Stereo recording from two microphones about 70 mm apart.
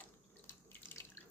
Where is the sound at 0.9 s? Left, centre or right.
Left.